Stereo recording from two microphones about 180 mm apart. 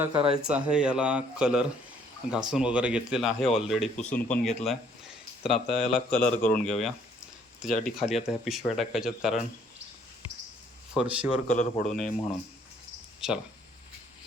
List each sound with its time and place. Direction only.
0.1 s speech: 30° right (ahead or behind)
0.4 s speech: 5° right (ahead or behind)
10.9 s speech: 5° right (ahead or behind)
11.4 s speech: 45° left (ahead or behind)
13.2 s speech: 5° right (ahead or behind)